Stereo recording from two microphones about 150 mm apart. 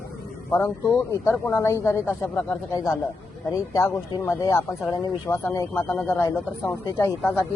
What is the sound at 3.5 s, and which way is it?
Speech, 20° left (ahead or behind).